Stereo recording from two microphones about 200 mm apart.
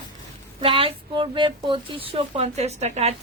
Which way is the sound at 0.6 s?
30° right (ahead or behind).